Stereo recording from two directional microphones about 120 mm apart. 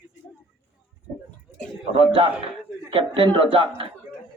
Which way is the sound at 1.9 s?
45° right (ahead or behind).